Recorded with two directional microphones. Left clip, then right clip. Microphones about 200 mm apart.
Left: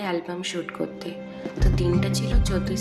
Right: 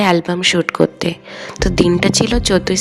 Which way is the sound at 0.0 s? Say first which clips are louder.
Right 14 dB; 55° left (ahead or behind).